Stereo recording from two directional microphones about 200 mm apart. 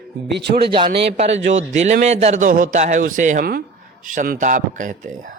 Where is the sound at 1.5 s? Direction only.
35° right (ahead or behind).